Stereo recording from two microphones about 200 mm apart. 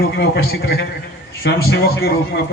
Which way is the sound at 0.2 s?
50° left (ahead or behind).